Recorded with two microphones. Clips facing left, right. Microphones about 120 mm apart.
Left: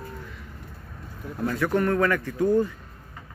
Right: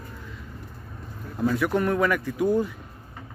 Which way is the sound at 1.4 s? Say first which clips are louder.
Right 1 dB; 10° right (ahead or behind).